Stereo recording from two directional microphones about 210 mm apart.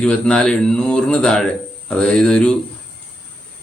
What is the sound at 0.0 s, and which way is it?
Speech, 5° left (ahead or behind).